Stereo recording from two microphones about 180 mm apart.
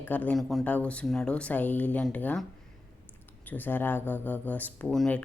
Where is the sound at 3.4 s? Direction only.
10° left (ahead or behind).